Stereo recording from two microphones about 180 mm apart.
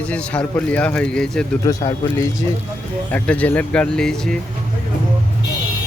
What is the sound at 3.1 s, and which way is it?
Speech, 10° left (ahead or behind).